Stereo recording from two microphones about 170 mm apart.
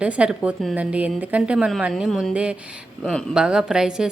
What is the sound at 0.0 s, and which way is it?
A woman's voice, 5° right (ahead or behind).